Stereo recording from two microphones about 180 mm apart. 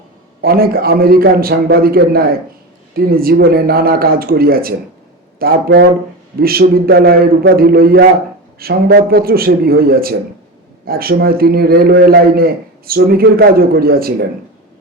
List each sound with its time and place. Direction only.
0.4 s a man's voice: 55° right (ahead or behind)